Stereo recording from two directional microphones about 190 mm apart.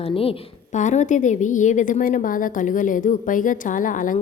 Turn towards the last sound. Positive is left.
turn(degrees=45)  # may be behind; listen again after turning